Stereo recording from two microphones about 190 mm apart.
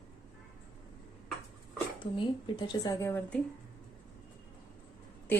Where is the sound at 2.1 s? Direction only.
25° left (ahead or behind).